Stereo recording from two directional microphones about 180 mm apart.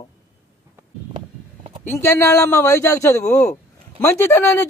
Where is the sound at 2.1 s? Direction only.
15° left (ahead or behind).